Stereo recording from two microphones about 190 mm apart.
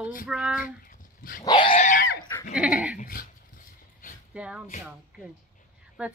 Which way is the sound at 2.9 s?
50° left (ahead or behind).